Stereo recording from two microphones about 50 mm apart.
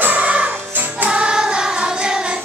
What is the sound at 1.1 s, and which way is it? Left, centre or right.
Music, centre.